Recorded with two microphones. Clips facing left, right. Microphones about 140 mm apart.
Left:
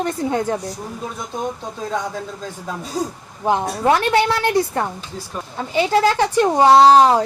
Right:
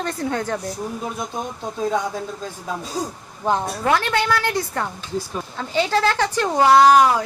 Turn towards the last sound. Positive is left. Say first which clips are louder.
# left 3 dB
turn(degrees=30)  # may be behind; listen again after turning